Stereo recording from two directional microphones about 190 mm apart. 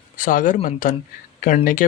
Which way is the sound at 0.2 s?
45° left (ahead or behind).